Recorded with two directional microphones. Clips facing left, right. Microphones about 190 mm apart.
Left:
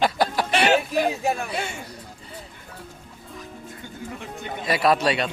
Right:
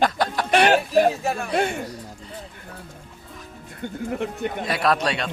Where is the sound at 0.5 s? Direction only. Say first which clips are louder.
Right 5 dB; 50° right (ahead or behind).